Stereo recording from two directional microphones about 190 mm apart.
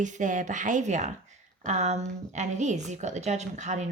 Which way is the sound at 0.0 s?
40° right (ahead or behind).